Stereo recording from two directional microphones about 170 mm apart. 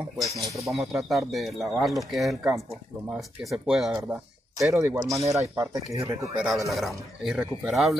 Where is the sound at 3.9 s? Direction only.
15° right (ahead or behind).